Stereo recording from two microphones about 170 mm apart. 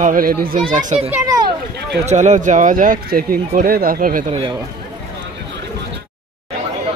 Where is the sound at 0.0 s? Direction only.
55° right (ahead or behind).